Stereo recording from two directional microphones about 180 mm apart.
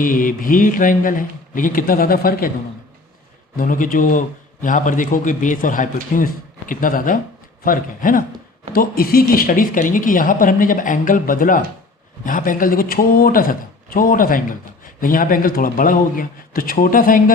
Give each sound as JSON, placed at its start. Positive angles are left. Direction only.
{"t": 0.0, "sound": "speech", "side_deg": 50}
{"t": 3.6, "sound": "speech", "side_deg": 50}